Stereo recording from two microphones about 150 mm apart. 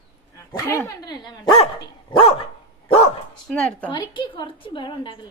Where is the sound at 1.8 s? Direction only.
35° left (ahead or behind).